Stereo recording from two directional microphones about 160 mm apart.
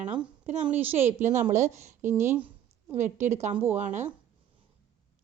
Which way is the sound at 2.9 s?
45° right (ahead or behind).